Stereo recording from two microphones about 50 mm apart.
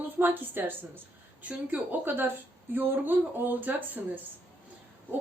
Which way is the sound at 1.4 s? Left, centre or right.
Right.